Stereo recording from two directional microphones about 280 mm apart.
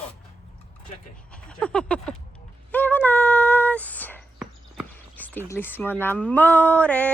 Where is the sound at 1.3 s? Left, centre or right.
Centre.